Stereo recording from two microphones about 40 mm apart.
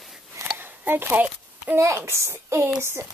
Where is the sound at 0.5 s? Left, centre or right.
Right.